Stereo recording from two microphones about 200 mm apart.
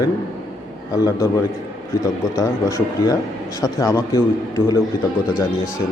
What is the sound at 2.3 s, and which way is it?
A man's voice, 15° left (ahead or behind).